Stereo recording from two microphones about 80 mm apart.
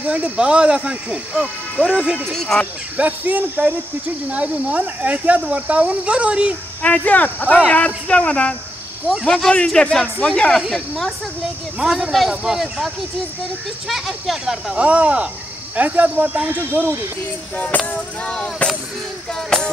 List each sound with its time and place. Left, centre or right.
0.0 s speech: centre
1.3 s speech: centre
2.0 s speech: centre
2.3 s music: centre
3.0 s speech: right
6.8 s speech: centre
7.6 s music: centre
10.7 s a man's voice: centre; by 17.0 s right
17.6 s music: centre